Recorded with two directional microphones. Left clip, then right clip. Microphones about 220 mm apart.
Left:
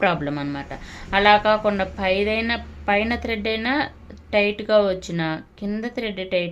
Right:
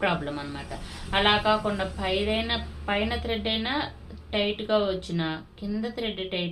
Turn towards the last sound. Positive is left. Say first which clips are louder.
# left 6 dB
turn(degrees=45)  # may be behind; listen again after turning